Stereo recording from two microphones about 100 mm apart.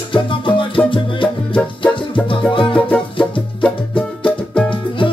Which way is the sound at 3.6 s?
10° left (ahead or behind).